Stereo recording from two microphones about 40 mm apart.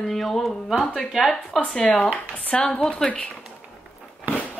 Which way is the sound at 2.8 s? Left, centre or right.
Centre.